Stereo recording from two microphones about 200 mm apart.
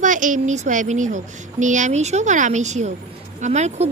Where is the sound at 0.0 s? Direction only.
40° right (ahead or behind).